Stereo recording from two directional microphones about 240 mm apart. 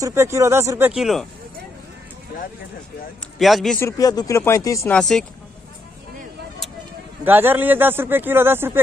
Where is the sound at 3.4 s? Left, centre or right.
Centre.